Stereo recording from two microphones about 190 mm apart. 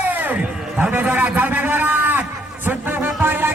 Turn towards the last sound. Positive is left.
turn(degrees=-10)  # may be behind; listen again after turning